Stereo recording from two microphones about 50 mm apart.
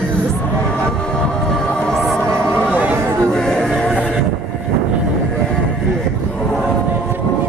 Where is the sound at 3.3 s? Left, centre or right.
Centre.